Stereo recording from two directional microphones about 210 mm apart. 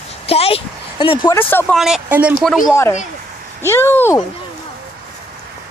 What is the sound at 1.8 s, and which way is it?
Speech, centre (ahead or behind).